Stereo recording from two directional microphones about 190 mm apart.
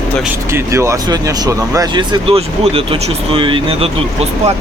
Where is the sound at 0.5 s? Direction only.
15° right (ahead or behind).